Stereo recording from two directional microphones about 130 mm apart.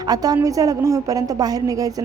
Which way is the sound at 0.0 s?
30° right (ahead or behind).